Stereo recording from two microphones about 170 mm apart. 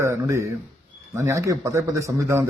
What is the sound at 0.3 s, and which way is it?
A man's voice, 15° right (ahead or behind).